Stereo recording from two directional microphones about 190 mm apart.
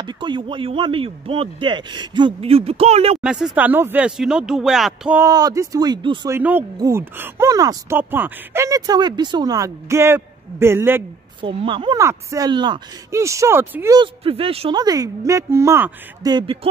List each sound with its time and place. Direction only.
0.0 s speech: 25° right (ahead or behind)
3.2 s speech: 5° right (ahead or behind)
5.2 s speech: 20° right (ahead or behind)
11.4 s speech: 25° right (ahead or behind)
13.9 s speech: 30° right (ahead or behind)